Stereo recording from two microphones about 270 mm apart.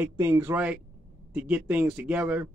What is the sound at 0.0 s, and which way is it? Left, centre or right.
Speech, centre.